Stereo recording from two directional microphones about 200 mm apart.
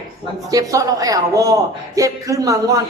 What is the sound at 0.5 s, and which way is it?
A woman's voice, 15° right (ahead or behind).